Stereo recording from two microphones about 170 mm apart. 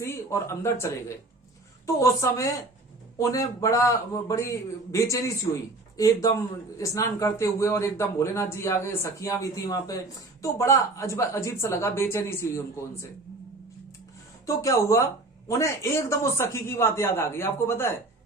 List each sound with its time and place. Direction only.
0.0 s a man's voice: 15° left (ahead or behind)
14.4 s a man's voice: 20° left (ahead or behind)